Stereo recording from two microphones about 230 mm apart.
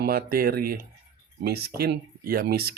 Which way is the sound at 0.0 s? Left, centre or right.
Right.